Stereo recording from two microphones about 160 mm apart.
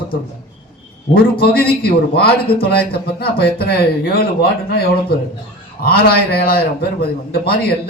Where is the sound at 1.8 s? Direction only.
80° left.